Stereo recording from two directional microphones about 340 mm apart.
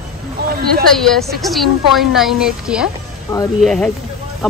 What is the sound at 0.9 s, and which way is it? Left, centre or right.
Speech, centre.